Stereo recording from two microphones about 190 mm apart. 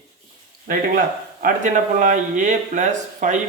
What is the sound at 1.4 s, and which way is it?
Speech, 40° right (ahead or behind).